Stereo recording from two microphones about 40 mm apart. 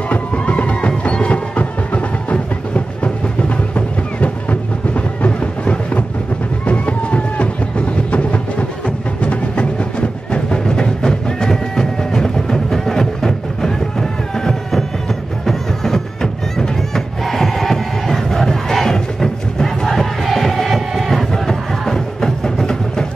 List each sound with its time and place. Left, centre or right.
0.1 s music: left; by 21.3 s centre
21.3 s music: centre